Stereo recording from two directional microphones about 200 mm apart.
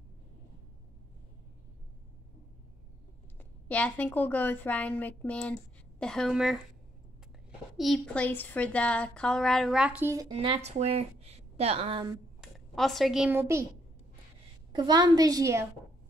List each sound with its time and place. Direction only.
3.3 s a woman's voice: 5° left (ahead or behind)
7.7 s a woman's voice: centre (ahead or behind)
10.3 s a woman's voice: 25° right (ahead or behind)
12.4 s speech: centre (ahead or behind)
14.7 s a woman's voice: 20° right (ahead or behind)